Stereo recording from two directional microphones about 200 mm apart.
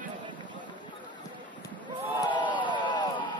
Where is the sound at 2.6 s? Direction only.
25° left (ahead or behind).